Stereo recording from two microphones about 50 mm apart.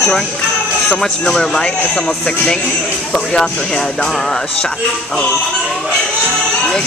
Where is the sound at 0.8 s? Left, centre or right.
Centre.